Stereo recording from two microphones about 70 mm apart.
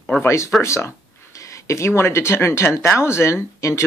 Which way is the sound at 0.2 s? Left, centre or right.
Left.